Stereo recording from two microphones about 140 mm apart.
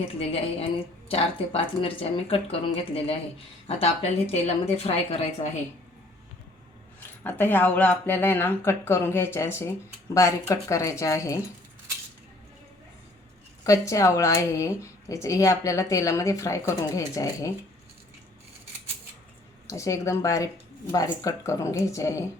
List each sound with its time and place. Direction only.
1.1 s speech: 40° left (ahead or behind)
7.3 s speech: 15° left (ahead or behind)
13.7 s speech: 25° left (ahead or behind)
19.6 s speech: 20° left (ahead or behind)